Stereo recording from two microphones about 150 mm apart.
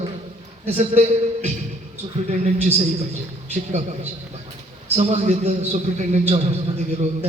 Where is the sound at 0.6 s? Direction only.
45° right (ahead or behind).